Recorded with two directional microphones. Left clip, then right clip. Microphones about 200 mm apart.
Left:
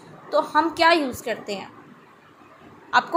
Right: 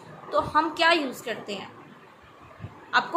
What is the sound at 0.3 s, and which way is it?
A woman's voice, 25° left (ahead or behind).